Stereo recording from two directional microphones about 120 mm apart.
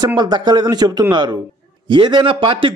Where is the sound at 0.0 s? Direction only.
35° right (ahead or behind).